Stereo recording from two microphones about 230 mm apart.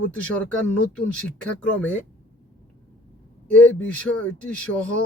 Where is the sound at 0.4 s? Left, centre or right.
Centre.